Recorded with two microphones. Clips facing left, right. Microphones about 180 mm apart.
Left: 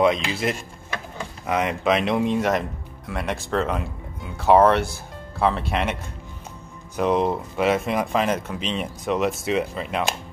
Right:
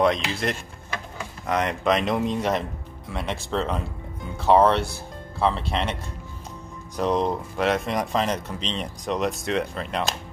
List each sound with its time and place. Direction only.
0.0 s speech: 5° left (ahead or behind)
7.0 s speech: 5° left (ahead or behind)